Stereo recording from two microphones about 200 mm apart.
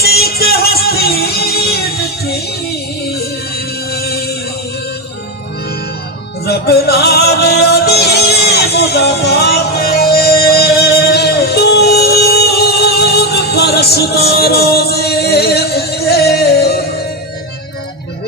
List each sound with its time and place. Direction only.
0.0 s music: 50° left (ahead or behind)
3.5 s music: 50° left (ahead or behind)
6.4 s music: 50° left (ahead or behind)